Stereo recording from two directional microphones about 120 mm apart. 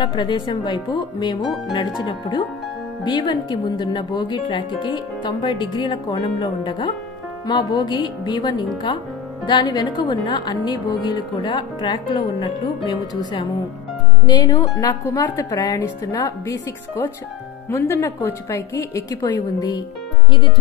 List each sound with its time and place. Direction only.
0.0 s speech: 40° left (ahead or behind)
14.2 s speech: 35° left (ahead or behind); by 19.1 s 20° left (ahead or behind)
19.2 s speech: 35° left (ahead or behind)